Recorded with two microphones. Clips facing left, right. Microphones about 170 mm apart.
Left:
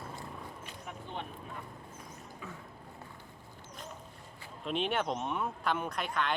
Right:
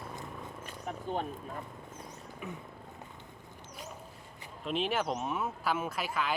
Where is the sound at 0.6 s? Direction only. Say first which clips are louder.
Right 5 dB; 40° right (ahead or behind).